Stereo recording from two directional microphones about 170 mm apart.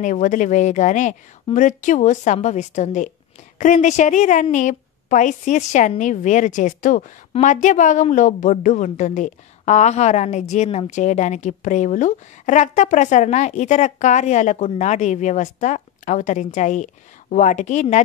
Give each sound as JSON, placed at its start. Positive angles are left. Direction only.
{"t": 0.0, "sound": "a woman's voice", "side_deg": 50}